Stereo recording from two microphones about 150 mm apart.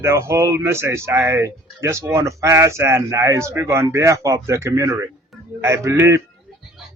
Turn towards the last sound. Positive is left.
turn(degrees=-20)  # may be behind; listen again after turning